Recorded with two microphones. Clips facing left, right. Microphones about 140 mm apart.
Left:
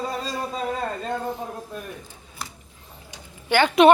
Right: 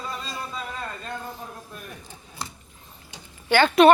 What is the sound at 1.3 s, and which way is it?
Speech, 20° left (ahead or behind).